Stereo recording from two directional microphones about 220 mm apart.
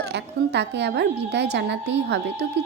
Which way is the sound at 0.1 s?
50° right (ahead or behind).